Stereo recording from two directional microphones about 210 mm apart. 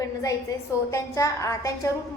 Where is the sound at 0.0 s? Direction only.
15° left (ahead or behind).